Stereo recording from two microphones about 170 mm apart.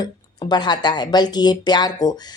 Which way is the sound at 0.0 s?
25° left (ahead or behind).